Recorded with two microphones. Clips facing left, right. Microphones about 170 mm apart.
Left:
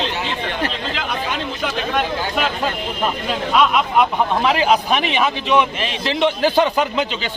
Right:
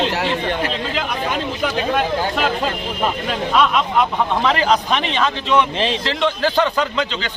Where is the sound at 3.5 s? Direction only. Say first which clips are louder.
Left 1 dB; 5° left (ahead or behind).